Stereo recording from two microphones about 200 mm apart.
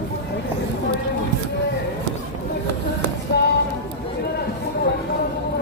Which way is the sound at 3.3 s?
55° left (ahead or behind).